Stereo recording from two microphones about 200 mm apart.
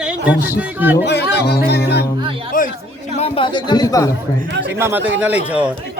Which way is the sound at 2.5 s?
45° left (ahead or behind).